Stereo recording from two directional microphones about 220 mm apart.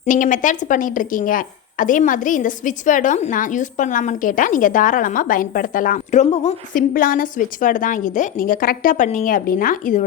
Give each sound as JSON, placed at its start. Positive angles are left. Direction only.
{"t": 0.0, "sound": "a woman's voice", "side_deg": 35}